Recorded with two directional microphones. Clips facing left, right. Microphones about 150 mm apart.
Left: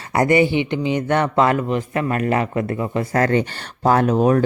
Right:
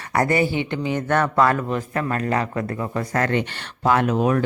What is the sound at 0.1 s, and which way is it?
Speech, 20° left (ahead or behind).